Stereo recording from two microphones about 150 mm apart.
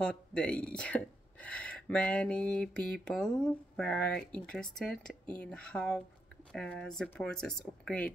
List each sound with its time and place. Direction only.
0.0 s speech: 5° left (ahead or behind)